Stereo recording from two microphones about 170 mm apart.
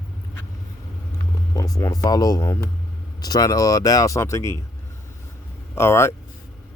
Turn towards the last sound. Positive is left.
turn(degrees=15)  # may be behind; listen again after turning